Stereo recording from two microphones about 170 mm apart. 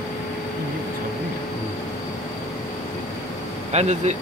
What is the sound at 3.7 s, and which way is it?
Speech, 40° right (ahead or behind).